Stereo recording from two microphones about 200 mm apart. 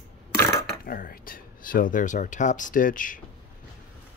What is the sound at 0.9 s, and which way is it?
Speech, 45° left (ahead or behind).